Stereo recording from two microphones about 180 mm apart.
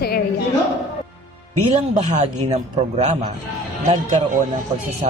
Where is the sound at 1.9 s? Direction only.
40° right (ahead or behind).